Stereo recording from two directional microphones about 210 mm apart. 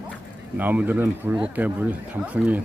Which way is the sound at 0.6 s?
10° right (ahead or behind).